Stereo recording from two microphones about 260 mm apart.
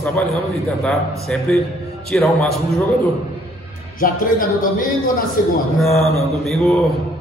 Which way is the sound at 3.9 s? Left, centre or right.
Left.